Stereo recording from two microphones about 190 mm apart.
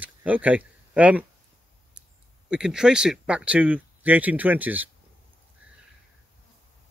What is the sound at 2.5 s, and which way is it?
Speech, 5° right (ahead or behind).